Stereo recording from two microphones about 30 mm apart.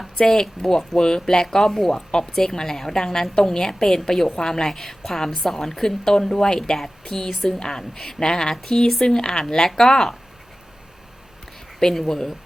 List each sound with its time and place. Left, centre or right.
0.4 s a woman's voice: centre
0.9 s a sound: left
1.4 s a woman's voice: centre
7.6 s a sound: left
9.0 s a woman's voice: left
11.8 s a woman's voice: centre